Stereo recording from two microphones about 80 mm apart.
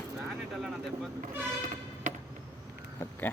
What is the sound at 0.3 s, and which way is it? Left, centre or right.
Vehicle, centre.